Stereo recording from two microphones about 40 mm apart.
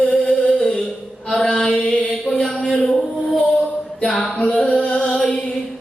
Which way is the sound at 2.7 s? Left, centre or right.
Centre.